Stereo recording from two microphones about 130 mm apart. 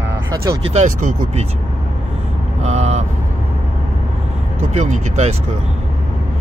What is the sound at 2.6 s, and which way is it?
Vehicle, 55° right (ahead or behind).